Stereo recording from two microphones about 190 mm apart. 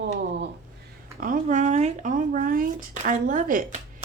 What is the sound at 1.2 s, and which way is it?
Speech, 45° right (ahead or behind).